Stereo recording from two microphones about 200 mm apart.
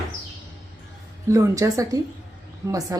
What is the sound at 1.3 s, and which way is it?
A woman's voice, 15° right (ahead or behind).